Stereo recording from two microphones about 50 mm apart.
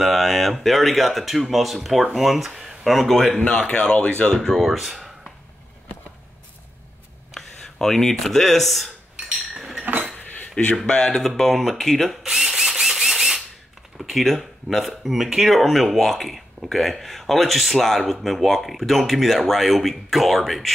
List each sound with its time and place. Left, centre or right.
0.0 s speech: centre
3.3 s speech: left
4.4 s speech: centre
7.3 s speech: centre
9.5 s cutlery: centre
10.5 s speech: centre
12.2 s drill: centre
13.9 s speech: centre